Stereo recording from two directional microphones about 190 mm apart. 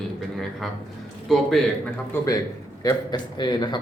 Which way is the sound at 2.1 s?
10° left (ahead or behind).